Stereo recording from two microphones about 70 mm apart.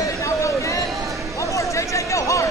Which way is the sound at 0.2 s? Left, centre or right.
Left.